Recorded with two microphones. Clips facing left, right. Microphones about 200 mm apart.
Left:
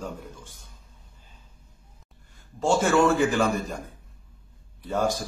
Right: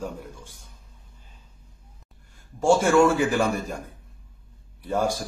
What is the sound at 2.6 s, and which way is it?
Speech, 10° right (ahead or behind).